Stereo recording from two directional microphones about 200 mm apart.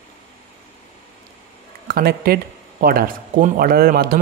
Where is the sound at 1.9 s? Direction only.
50° right (ahead or behind).